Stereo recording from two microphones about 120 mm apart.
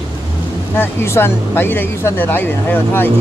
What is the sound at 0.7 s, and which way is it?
Speech, 20° left (ahead or behind).